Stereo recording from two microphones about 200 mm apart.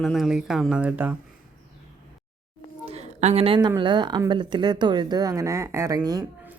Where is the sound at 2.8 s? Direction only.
30° right (ahead or behind).